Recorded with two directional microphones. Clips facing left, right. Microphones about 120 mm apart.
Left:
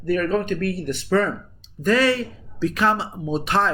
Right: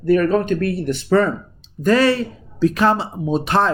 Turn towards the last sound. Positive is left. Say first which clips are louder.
# right 4 dB
turn(degrees=-35)  # may be behind; listen again after turning